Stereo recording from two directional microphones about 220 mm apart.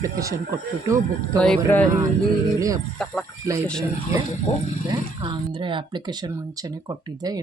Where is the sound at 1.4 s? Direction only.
5° left (ahead or behind).